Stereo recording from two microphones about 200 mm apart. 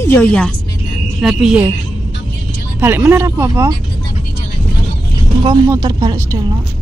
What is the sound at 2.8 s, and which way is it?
Speech, 10° right (ahead or behind).